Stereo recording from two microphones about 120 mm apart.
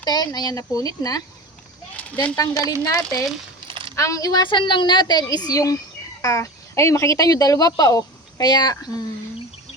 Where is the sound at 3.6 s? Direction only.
45° right (ahead or behind).